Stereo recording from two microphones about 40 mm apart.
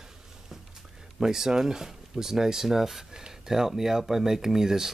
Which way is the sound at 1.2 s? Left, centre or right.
Centre.